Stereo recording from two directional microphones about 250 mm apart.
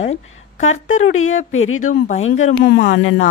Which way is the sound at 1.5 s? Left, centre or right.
Left.